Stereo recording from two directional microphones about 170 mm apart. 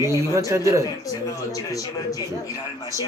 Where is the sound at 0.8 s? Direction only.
20° left (ahead or behind).